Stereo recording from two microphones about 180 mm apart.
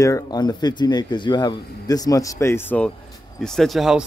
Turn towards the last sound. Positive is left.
turn(degrees=0)  # may be behind; listen again after turning